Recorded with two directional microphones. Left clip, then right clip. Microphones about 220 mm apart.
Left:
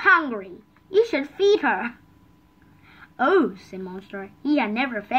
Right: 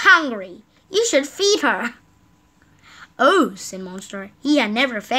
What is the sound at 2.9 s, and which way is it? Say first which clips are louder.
A woman's voice: right 4 dB; 40° right (ahead or behind).